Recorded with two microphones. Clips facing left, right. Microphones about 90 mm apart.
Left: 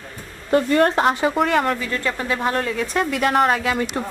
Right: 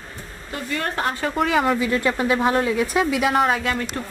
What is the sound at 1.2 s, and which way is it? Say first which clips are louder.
Speech: left 2 dB; centre (ahead or behind).